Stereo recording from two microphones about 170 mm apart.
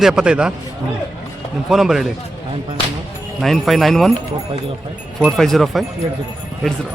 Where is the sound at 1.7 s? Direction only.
Centre (ahead or behind).